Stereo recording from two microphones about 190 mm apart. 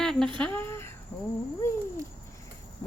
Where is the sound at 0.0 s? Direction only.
5° left (ahead or behind).